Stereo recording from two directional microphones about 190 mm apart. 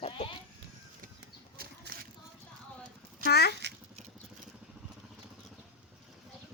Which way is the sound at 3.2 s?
60° left (ahead or behind).